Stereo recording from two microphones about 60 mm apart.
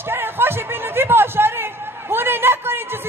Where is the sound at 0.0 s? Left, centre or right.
Right.